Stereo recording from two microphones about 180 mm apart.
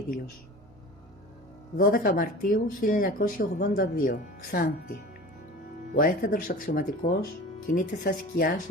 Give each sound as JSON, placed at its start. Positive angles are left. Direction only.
{"t": 1.8, "sound": "speech", "side_deg": 50}